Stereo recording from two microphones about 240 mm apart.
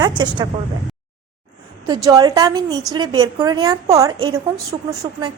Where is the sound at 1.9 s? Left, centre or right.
Centre.